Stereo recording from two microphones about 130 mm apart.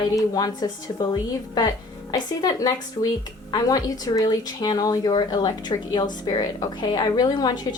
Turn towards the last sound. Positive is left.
turn(degrees=30)  # may be behind; listen again after turning